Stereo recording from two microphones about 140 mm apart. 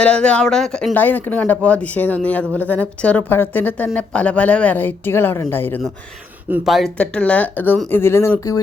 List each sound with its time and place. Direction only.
0.0 s speech: 10° left (ahead or behind)
6.7 s speech: centre (ahead or behind); by 8.3 s 15° left (ahead or behind)